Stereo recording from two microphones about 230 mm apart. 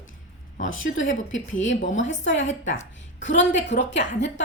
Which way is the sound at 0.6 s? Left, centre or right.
Left.